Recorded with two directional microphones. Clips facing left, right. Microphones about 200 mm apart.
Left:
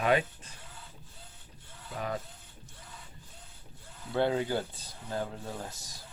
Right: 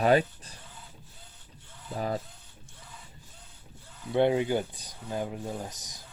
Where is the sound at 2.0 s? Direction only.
35° right (ahead or behind).